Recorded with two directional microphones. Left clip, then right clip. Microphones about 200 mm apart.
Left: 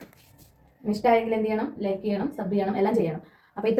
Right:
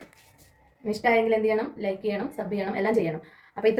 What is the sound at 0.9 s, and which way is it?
A woman's voice, 45° right (ahead or behind).